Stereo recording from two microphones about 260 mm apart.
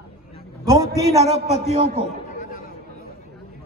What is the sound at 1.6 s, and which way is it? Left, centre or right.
Speech, right.